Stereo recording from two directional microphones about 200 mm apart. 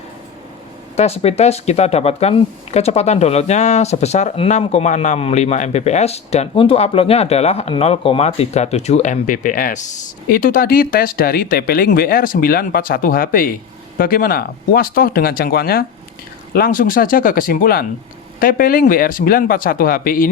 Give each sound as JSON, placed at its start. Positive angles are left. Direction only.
{"t": 0.9, "sound": "speech", "side_deg": 30}